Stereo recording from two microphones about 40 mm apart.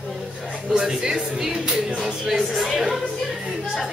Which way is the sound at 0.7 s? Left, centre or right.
Centre.